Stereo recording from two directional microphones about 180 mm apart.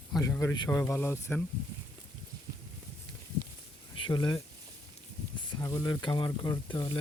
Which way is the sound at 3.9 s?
25° left (ahead or behind).